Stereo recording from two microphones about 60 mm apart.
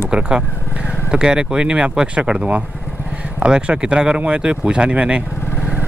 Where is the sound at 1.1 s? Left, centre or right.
Centre.